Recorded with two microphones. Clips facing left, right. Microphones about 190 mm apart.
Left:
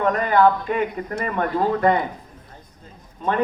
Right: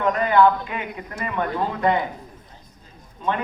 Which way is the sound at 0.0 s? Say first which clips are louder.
Even; 45° left (ahead or behind).